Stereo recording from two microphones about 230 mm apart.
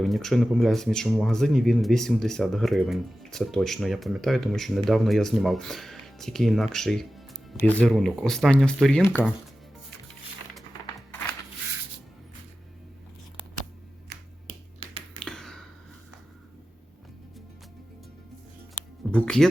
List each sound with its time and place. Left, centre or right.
0.0 s speech: centre
14.8 s finger snapping: right
15.2 s finger snapping: centre
19.1 s speech: centre